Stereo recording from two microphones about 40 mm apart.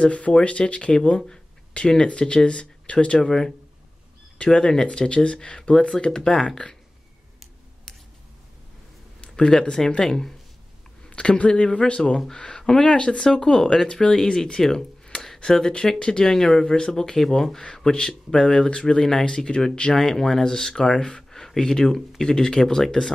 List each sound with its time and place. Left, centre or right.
0.0 s speech: left
4.5 s speech: centre
9.5 s speech: centre
11.1 s speech: left
20.0 s speech: centre
21.2 s a sound: centre
21.5 s speech: centre